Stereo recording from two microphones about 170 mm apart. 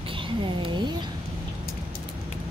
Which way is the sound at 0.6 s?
25° right (ahead or behind).